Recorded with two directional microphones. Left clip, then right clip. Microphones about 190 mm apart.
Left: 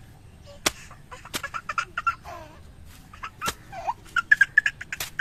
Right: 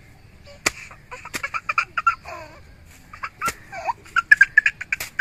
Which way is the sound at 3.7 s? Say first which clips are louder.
Right 4 dB; 40° right (ahead or behind).